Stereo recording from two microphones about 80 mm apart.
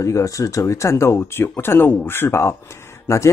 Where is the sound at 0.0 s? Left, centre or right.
Left.